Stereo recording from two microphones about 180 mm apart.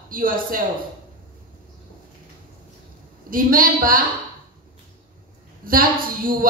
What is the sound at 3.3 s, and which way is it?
Speech, 50° right (ahead or behind).